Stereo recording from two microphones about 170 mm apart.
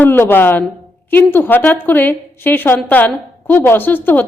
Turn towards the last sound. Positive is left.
turn(degrees=10)  # may be behind; listen again after turning